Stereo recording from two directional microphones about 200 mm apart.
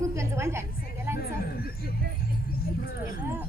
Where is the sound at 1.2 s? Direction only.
50° left (ahead or behind).